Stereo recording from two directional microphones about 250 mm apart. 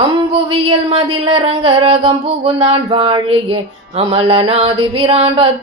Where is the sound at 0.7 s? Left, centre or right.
Right.